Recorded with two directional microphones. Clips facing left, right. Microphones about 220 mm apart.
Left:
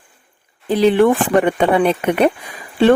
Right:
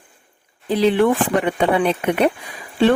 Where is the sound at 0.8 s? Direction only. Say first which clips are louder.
Left 3 dB; 50° left (ahead or behind).